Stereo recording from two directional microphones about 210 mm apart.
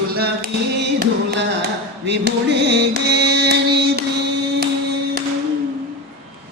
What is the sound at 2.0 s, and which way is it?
Carnatic music, 55° right (ahead or behind).